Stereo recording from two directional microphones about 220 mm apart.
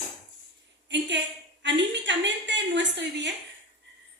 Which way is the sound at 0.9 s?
55° right (ahead or behind).